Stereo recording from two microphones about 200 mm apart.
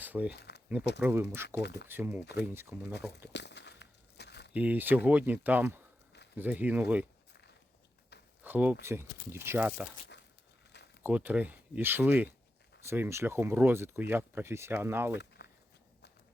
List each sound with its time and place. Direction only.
0.0 s speech: 10° right (ahead or behind)
0.3 s speech: 55° left (ahead or behind)
0.9 s speech: 10° right (ahead or behind)
1.5 s speech: 55° left (ahead or behind)
1.9 s speech: 10° right (ahead or behind)
3.3 s walk: 60° left (ahead or behind)
4.5 s speech: 5° right (ahead or behind)
8.1 s a sound: 55° left (ahead or behind)
8.4 s speech: 10° right (ahead or behind)
11.0 s speech: 10° right (ahead or behind)
15.1 s a sound: 60° left (ahead or behind)